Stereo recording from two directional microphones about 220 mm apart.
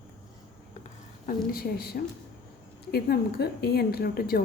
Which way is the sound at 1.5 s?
45° left (ahead or behind).